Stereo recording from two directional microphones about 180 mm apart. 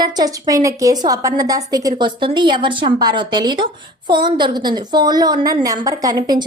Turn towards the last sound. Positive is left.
turn(degrees=-20)  # may be behind; listen again after turning